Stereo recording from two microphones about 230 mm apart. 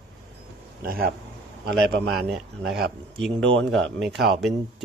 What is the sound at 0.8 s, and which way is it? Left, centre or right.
A man's voice, right.